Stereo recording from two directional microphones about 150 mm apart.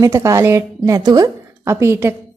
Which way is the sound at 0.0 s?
20° right (ahead or behind).